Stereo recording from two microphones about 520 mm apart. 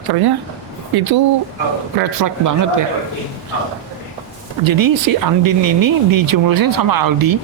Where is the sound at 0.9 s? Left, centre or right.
Right.